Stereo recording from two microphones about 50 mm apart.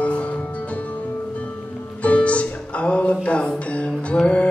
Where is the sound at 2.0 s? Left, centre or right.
Left.